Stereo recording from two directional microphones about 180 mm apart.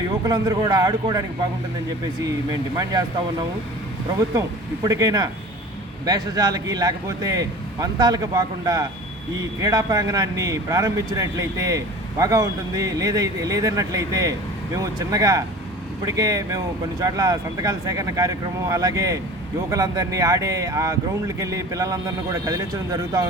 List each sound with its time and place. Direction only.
0.1 s speech: 20° right (ahead or behind)
2.2 s speech: 20° right (ahead or behind)
4.4 s speech: 20° right (ahead or behind)